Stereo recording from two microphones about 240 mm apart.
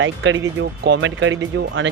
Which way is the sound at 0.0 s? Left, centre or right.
Right.